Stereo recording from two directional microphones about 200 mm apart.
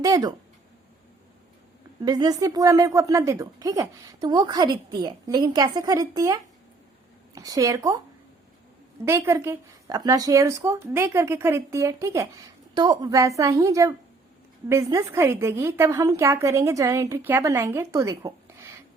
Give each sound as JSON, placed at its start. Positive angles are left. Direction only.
{"t": 0.0, "sound": "a woman's voice", "side_deg": -20}
{"t": 2.0, "sound": "a woman's voice", "side_deg": -20}
{"t": 9.0, "sound": "speech", "side_deg": -10}